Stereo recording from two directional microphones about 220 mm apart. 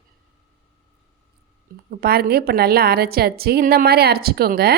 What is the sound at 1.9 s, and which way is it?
Speech, 45° right (ahead or behind).